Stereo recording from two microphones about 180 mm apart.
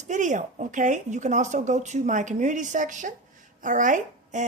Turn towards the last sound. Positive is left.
turn(degrees=-45)  # may be behind; listen again after turning